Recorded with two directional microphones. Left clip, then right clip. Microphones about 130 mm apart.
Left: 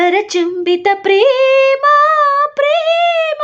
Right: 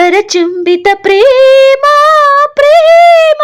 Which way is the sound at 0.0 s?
35° right (ahead or behind).